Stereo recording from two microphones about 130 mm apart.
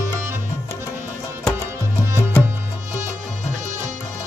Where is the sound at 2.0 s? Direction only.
20° right (ahead or behind).